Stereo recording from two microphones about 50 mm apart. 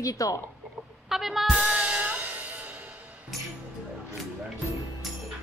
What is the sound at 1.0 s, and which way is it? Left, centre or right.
Music, centre.